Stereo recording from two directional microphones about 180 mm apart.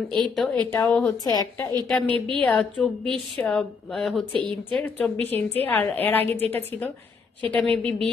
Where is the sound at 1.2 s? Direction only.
20° left (ahead or behind).